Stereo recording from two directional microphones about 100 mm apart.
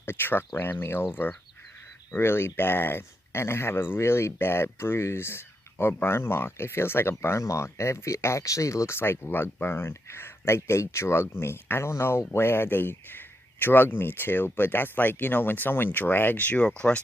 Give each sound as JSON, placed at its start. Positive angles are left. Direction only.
{"t": 0.0, "sound": "speech", "side_deg": 20}